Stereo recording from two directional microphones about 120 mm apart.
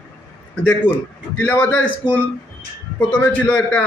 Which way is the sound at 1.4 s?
15° left (ahead or behind).